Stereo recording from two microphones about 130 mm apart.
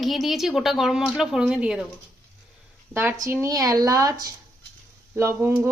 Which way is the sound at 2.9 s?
20° right (ahead or behind).